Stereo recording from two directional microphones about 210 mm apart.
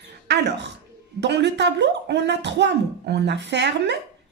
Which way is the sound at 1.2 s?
55° right (ahead or behind).